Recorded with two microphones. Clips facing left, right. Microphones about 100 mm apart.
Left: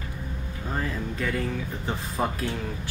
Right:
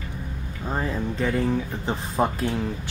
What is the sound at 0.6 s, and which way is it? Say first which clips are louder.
Speech: right 4 dB; 25° right (ahead or behind).